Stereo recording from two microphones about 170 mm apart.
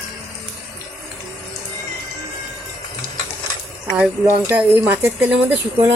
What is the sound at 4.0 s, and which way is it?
Speech, 10° right (ahead or behind).